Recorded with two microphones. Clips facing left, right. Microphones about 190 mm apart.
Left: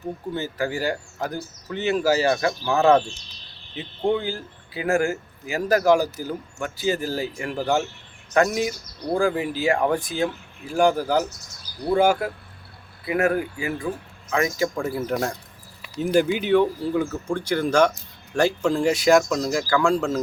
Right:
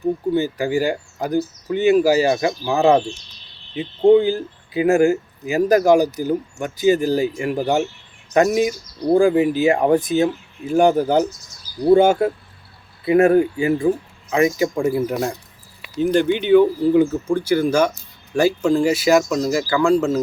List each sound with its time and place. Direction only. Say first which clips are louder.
0.3 s speech: right 7 dB; 15° right (ahead or behind)
16.0 s speech: right 3 dB; 5° left (ahead or behind)